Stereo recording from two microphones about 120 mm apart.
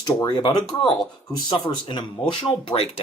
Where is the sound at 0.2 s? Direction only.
35° left (ahead or behind).